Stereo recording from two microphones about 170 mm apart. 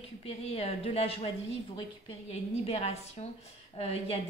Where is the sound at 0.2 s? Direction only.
35° left (ahead or behind).